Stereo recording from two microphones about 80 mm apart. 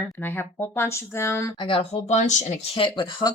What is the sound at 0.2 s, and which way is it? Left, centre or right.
Speech, left.